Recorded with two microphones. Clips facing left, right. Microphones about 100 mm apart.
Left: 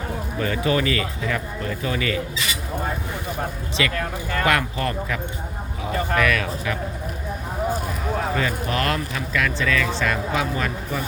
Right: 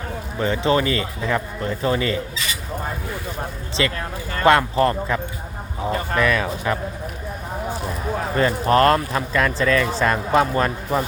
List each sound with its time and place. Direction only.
0.3 s speech: 25° right (ahead or behind)
3.8 s speech: 30° right (ahead or behind)
8.4 s speech: 40° right (ahead or behind)